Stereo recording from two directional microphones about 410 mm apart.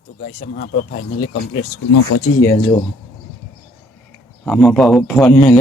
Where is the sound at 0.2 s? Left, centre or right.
Centre.